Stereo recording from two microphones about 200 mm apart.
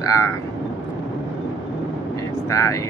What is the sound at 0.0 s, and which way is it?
Speech, 15° left (ahead or behind).